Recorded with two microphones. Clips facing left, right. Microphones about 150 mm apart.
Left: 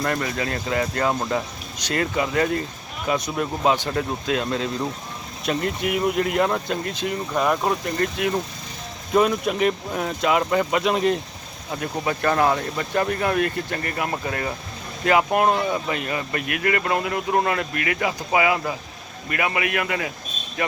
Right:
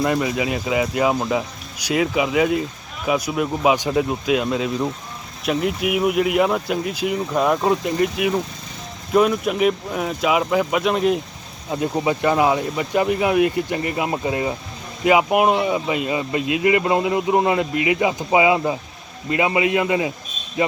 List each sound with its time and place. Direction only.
0.0 s speech: 15° right (ahead or behind)
11.7 s speech: 20° right (ahead or behind)